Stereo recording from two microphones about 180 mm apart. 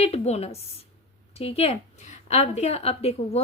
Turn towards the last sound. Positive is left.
turn(degrees=35)  # may be behind; listen again after turning